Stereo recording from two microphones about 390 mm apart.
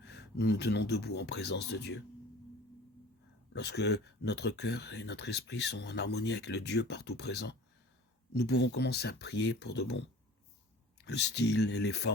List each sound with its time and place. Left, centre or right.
0.0 s speech: left
3.5 s speech: left
9.3 s speech: left
9.6 s speech: left
11.3 s speech: left